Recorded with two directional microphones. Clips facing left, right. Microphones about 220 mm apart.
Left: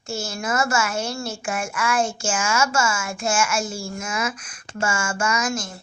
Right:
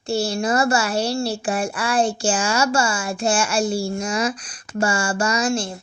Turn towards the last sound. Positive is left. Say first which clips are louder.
# right 4 dB
turn(degrees=-30)  # may be behind; listen again after turning